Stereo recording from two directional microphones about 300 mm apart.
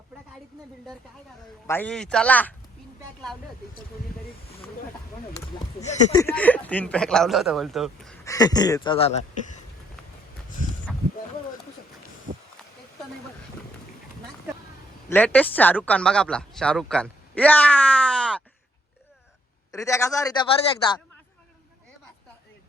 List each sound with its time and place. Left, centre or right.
1.6 s speech: centre
5.8 s speech: left
6.1 s speech: centre
10.9 s a sound: centre
12.3 s a sound: right
15.1 s speech: centre
19.7 s a man's voice: centre